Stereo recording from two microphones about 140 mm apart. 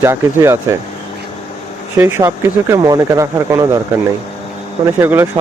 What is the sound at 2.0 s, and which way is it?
Speech, 20° right (ahead or behind).